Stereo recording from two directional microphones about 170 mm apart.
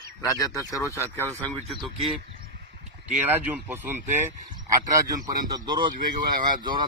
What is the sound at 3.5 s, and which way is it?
Speech, 10° right (ahead or behind).